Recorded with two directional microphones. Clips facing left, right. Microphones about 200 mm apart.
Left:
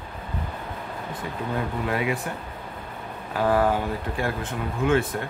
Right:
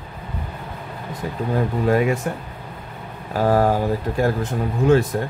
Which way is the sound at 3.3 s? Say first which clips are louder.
Right 4 dB; 40° right (ahead or behind).